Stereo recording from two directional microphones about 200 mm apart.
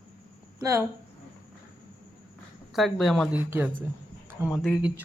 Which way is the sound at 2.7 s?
Centre (ahead or behind).